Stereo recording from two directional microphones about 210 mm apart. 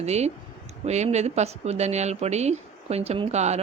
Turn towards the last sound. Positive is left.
turn(degrees=-30)  # may be behind; listen again after turning